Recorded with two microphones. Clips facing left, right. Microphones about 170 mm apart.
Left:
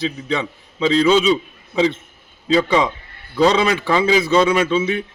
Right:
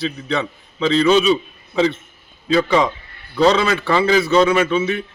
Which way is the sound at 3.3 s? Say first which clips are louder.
Even; 15° left (ahead or behind).